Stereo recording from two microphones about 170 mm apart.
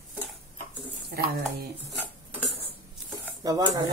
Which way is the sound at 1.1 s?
65° right (ahead or behind).